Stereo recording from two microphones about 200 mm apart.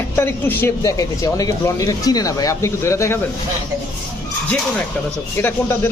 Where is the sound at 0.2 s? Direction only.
10° left (ahead or behind).